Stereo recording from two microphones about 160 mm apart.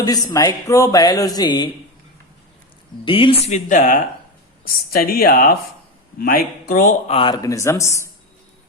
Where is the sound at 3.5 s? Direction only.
50° left (ahead or behind).